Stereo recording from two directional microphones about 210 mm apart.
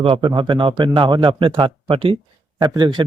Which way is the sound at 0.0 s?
20° right (ahead or behind).